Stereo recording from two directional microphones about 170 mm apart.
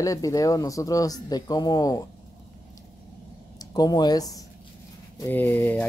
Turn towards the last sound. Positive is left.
turn(degrees=10)  # may be behind; listen again after turning